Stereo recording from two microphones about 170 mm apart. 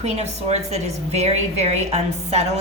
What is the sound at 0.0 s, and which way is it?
A woman's voice, 40° right (ahead or behind).